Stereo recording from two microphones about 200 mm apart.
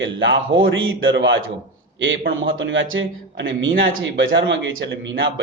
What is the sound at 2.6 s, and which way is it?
A man's voice, 70° right (ahead or behind).